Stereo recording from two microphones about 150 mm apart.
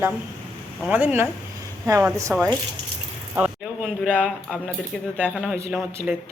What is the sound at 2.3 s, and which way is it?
Speech, 15° right (ahead or behind).